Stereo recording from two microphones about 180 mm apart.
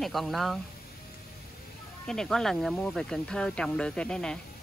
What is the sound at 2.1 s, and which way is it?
Speech, 5° left (ahead or behind).